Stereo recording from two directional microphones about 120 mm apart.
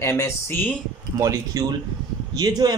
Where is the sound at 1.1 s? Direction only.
25° right (ahead or behind).